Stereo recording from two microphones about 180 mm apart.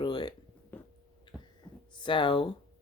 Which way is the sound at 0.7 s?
10° left (ahead or behind).